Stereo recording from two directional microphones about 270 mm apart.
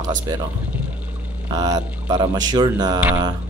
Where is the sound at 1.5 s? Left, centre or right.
Centre.